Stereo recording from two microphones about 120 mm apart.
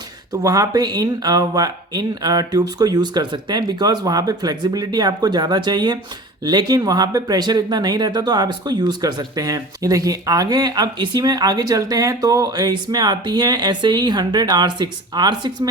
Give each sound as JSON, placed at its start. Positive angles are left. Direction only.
{"t": 0.4, "sound": "speech", "side_deg": -30}